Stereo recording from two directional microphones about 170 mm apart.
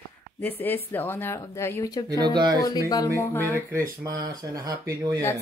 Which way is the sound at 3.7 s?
15° right (ahead or behind).